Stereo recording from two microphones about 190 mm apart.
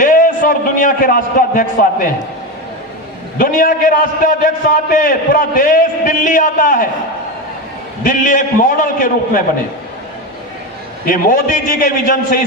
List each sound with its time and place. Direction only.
0.0 s a man's voice: 45° left (ahead or behind)
3.3 s a man's voice: 45° left (ahead or behind)
8.0 s a man's voice: 45° left (ahead or behind)
11.0 s a man's voice: 45° left (ahead or behind)